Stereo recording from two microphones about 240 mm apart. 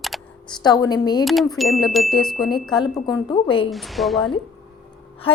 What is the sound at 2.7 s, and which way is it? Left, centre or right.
Speech, centre.